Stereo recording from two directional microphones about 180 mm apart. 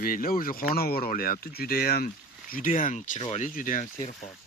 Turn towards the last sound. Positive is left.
turn(degrees=45)  # may be behind; listen again after turning